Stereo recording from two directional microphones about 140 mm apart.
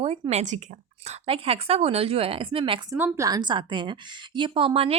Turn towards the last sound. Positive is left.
turn(degrees=-45)  # may be behind; listen again after turning